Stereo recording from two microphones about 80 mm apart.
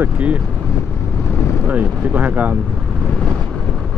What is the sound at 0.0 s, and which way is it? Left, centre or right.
Speech, centre.